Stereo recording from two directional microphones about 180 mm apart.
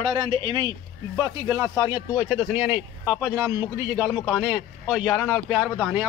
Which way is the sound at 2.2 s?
5° right (ahead or behind).